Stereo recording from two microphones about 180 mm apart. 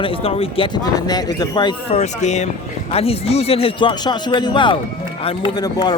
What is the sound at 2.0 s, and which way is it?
A man's voice, 40° left (ahead or behind).